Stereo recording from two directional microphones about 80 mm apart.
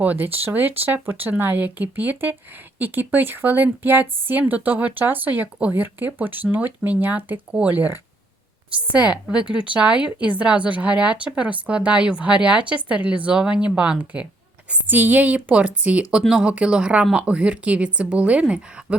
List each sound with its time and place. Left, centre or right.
0.0 s speech: right